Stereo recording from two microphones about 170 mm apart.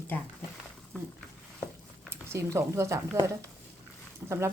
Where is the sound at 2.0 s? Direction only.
15° right (ahead or behind).